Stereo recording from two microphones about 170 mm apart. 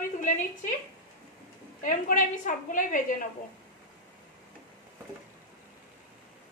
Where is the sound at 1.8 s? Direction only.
50° left (ahead or behind).